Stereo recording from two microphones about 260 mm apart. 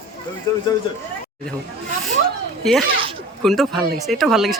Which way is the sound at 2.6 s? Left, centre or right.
Centre.